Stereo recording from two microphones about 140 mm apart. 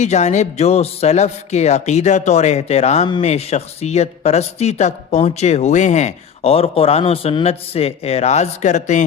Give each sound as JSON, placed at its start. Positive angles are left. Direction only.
{"t": 0.0, "sound": "speech", "side_deg": 55}